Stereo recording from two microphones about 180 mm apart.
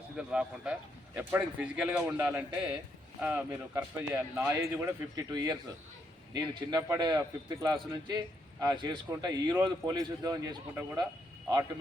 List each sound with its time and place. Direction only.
0.2 s a man's voice: 5° right (ahead or behind); by 11.0 s 20° right (ahead or behind)